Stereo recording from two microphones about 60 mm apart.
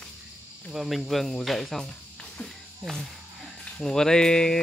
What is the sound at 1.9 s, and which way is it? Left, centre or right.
Music, centre.